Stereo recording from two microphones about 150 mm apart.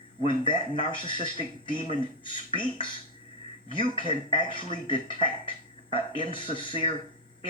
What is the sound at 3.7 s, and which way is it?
Speech, 35° left (ahead or behind).